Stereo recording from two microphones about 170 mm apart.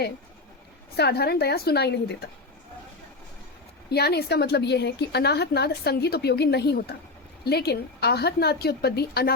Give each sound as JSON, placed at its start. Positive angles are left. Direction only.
{"t": 0.9, "sound": "a woman's voice", "side_deg": 70}
{"t": 3.8, "sound": "a woman's voice", "side_deg": 70}